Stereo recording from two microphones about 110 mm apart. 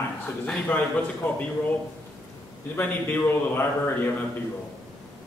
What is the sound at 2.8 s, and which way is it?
Speech, 15° left (ahead or behind).